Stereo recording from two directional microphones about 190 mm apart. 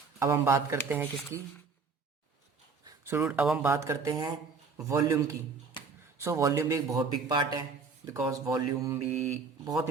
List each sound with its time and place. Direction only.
0.2 s speech: 15° right (ahead or behind)
2.8 s speech: 15° right (ahead or behind)